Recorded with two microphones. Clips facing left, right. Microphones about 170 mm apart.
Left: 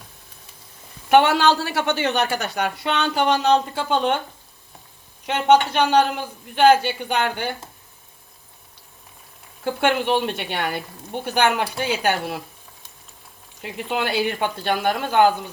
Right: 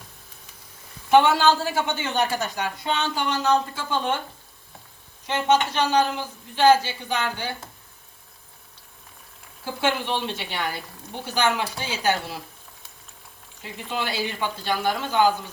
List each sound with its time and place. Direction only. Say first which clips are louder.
1.1 s a woman's voice: left 2 dB; 70° left (ahead or behind)
5.2 s speech: left 5 dB; 60° left (ahead or behind)
9.6 s speech: left 5 dB; 55° left (ahead or behind)
13.6 s speech: left 5 dB; 60° left (ahead or behind)